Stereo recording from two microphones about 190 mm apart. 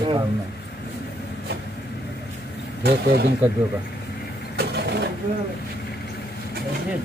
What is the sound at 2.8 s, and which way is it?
Speech, 60° right (ahead or behind).